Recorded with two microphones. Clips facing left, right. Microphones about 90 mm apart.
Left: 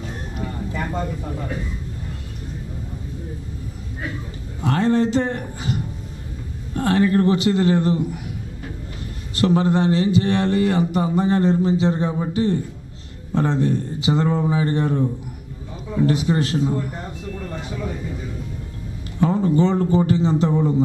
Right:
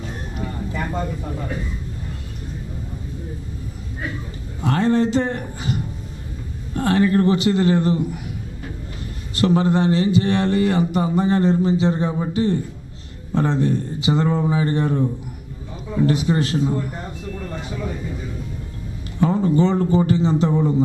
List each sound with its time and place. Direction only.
0.4 s a sound: 20° right (ahead or behind)
4.6 s speech: 15° right (ahead or behind)
6.8 s speech: 15° right (ahead or behind)
9.4 s speech: 15° right (ahead or behind)
19.2 s speech: 15° right (ahead or behind)